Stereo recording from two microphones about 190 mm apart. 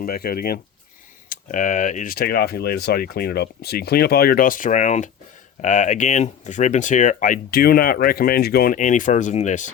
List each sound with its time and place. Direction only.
0.0 s speech: 50° left (ahead or behind)